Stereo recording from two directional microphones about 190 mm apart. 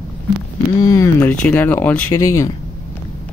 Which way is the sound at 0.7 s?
20° left (ahead or behind).